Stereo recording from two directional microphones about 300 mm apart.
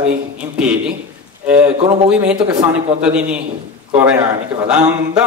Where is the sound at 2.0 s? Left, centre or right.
Centre.